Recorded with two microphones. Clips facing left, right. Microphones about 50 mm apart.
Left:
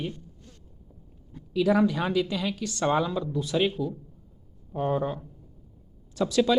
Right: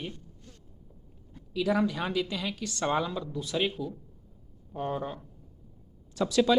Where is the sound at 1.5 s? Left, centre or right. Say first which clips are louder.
Left 5 dB; left.